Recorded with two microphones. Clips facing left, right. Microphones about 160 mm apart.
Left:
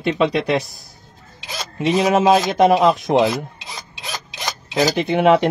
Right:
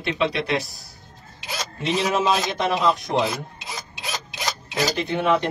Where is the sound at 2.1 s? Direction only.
50° left (ahead or behind).